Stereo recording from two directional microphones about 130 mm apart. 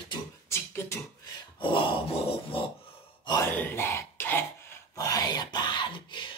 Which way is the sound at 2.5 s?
45° left (ahead or behind).